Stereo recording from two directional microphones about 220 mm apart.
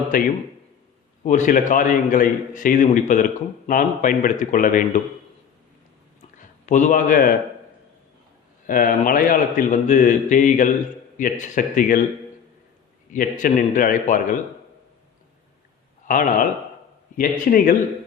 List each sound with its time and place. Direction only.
1.2 s a man's voice: 35° left (ahead or behind)
6.7 s a man's voice: 35° left (ahead or behind)
8.6 s a man's voice: 40° left (ahead or behind)
13.1 s a man's voice: 35° left (ahead or behind)
16.0 s a man's voice: 35° left (ahead or behind)